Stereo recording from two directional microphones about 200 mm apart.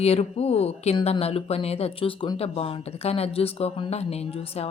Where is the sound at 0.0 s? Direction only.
30° left (ahead or behind).